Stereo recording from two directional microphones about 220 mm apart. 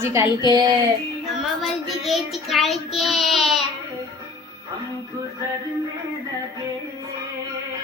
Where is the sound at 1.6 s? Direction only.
Centre (ahead or behind).